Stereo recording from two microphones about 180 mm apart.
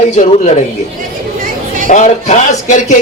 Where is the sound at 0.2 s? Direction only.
40° left (ahead or behind).